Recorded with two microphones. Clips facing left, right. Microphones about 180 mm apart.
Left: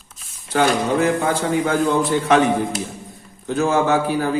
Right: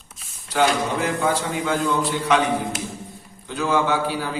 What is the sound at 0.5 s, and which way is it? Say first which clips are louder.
A man's voice: left 3 dB; 50° left (ahead or behind).